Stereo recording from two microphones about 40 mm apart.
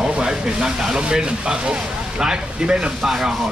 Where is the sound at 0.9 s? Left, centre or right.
Right.